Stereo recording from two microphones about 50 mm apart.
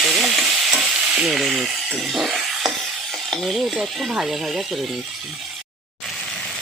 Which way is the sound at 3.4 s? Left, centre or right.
Centre.